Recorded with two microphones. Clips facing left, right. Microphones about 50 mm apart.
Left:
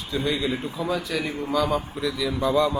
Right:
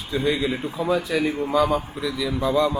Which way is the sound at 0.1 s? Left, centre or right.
Right.